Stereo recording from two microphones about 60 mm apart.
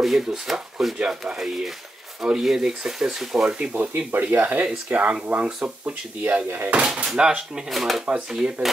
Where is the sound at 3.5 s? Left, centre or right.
Right.